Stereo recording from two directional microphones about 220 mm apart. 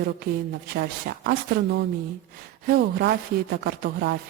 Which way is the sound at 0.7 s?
45° right (ahead or behind).